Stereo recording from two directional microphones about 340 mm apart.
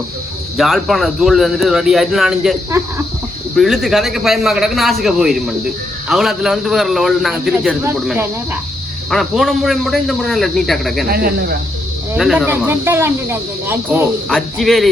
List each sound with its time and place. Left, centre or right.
0.5 s speech: centre
11.1 s speech: right
12.1 s speech: centre